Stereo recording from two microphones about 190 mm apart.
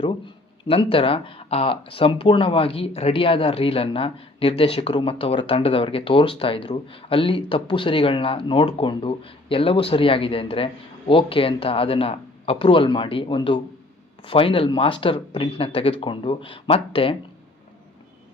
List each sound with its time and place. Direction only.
0.6 s speech: 30° left (ahead or behind)